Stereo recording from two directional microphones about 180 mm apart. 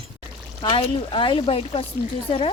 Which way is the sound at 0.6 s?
30° left (ahead or behind).